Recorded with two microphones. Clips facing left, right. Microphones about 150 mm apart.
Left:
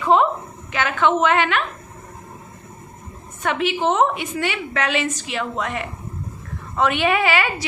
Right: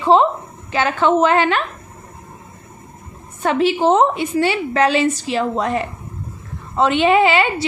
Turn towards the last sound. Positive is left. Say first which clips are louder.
# right 6 dB
turn(degrees=-25)  # may be behind; listen again after turning